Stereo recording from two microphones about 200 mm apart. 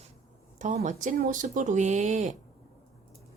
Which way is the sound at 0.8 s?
40° right (ahead or behind).